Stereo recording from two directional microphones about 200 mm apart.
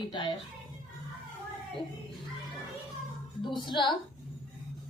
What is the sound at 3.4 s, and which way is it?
Speech, 25° left (ahead or behind).